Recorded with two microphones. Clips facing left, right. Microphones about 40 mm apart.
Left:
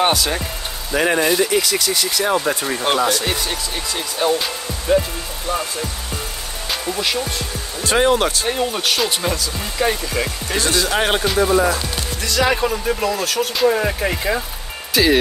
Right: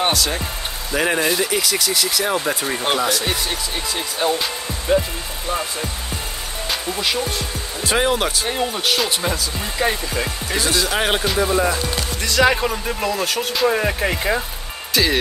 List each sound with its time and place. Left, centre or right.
0.0 s speech: centre
12.4 s speech: centre
14.9 s speech: centre